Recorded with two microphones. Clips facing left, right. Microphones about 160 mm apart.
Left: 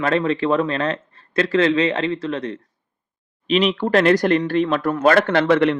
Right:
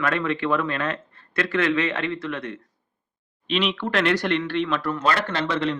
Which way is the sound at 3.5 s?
40° left (ahead or behind).